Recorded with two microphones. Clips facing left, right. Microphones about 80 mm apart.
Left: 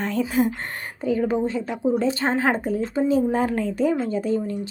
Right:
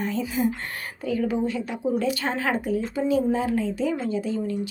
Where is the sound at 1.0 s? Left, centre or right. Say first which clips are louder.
Left 3 dB; left.